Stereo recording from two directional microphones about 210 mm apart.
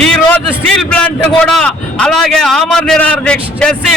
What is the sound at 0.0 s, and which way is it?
A man's voice, 5° left (ahead or behind).